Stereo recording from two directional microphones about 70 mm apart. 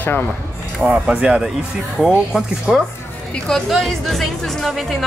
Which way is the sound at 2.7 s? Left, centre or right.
Centre.